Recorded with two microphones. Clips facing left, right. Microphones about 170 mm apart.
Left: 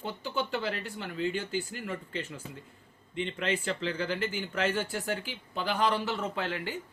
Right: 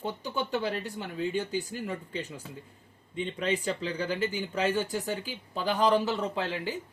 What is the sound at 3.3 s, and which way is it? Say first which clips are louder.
Speech: right 3 dB; 15° right (ahead or behind).